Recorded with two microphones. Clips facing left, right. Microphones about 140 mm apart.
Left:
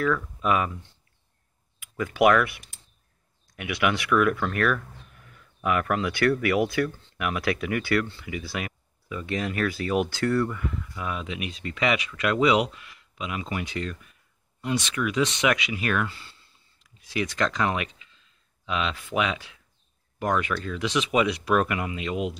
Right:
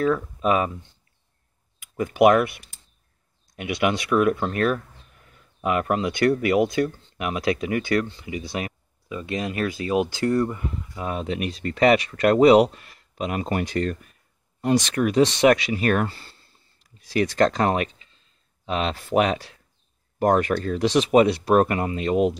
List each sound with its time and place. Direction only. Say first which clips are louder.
0.0 s speech: right 4 dB; 25° right (ahead or behind)
2.0 s speech: right 3 dB; 25° right (ahead or behind); by 22.3 s 45° right (ahead or behind)